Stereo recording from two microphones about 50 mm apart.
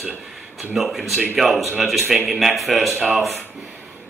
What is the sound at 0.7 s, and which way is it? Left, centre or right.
Speech, centre.